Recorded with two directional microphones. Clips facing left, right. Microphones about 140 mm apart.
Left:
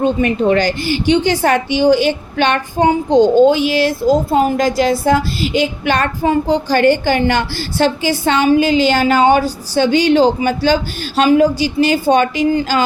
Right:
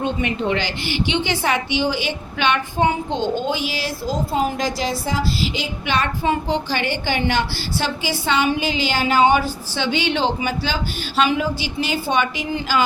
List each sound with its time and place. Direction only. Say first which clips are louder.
0.0 s a woman's voice: left 8 dB; 45° left (ahead or behind)